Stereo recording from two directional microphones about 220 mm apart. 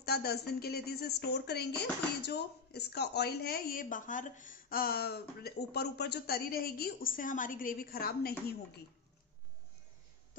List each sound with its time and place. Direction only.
0.0 s speech: 45° left (ahead or behind)